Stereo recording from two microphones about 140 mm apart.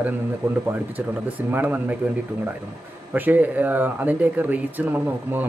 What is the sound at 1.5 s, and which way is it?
Speech, 10° right (ahead or behind).